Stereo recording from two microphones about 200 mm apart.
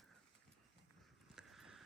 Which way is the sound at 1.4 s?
Centre (ahead or behind).